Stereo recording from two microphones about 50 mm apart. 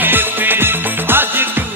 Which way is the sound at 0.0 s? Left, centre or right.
Right.